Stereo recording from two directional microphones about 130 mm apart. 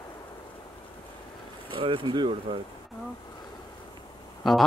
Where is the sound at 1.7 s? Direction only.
40° right (ahead or behind).